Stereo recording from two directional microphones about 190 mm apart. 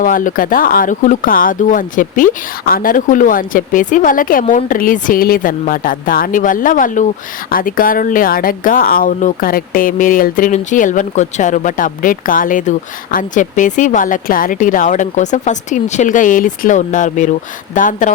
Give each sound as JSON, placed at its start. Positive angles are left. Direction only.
{"t": 0.0, "sound": "speech", "side_deg": 45}